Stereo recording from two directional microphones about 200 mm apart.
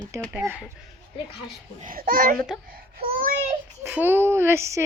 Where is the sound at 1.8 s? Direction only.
45° right (ahead or behind).